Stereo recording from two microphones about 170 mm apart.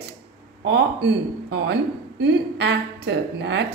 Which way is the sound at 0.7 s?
90° right.